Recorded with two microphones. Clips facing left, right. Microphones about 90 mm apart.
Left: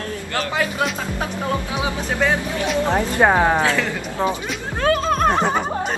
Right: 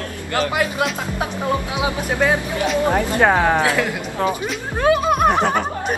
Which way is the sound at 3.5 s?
15° right (ahead or behind).